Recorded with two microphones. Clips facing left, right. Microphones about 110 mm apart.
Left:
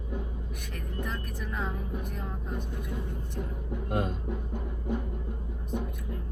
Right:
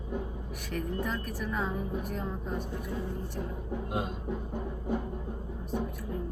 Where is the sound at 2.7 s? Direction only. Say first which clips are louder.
Right 2 dB; 20° left (ahead or behind).